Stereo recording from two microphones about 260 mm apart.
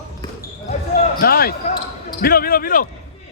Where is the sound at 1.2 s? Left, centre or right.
Left.